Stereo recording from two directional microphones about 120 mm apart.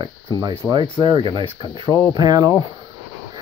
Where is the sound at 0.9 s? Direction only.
40° right (ahead or behind).